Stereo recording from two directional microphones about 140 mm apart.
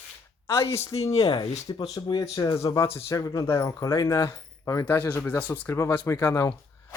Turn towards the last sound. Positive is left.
turn(degrees=20)  # may be behind; listen again after turning